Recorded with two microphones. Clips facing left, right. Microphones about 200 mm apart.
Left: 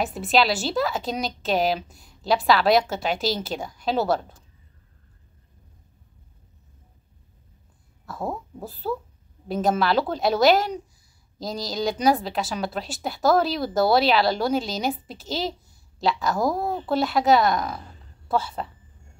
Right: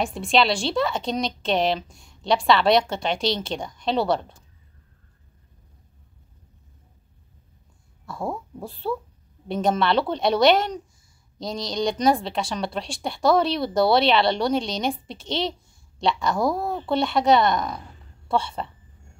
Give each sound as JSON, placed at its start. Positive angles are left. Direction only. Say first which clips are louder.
{"t": 0.0, "sound": "a woman's voice", "louder": "even", "side_deg": 5}
{"t": 8.0, "sound": "a woman's voice", "louder": "right 1 dB", "side_deg": 0}